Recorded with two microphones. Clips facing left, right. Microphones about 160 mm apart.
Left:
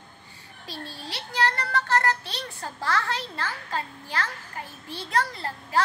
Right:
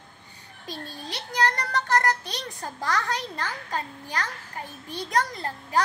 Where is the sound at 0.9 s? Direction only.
20° right (ahead or behind).